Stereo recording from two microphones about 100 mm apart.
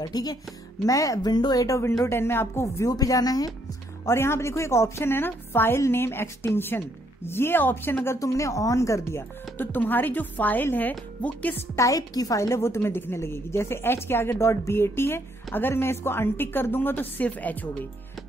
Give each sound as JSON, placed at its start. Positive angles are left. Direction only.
{"t": 0.0, "sound": "a woman's voice", "side_deg": 40}
{"t": 4.0, "sound": "a woman's voice", "side_deg": 25}
{"t": 9.6, "sound": "a woman's voice", "side_deg": 20}
{"t": 11.7, "sound": "a woman's voice", "side_deg": 35}